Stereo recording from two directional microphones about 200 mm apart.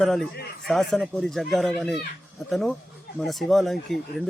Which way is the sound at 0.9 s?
Centre (ahead or behind).